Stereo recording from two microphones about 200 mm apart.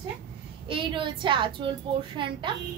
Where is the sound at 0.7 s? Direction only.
25° right (ahead or behind).